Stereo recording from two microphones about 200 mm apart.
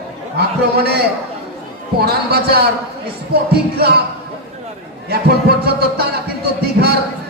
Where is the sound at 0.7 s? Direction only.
55° right (ahead or behind).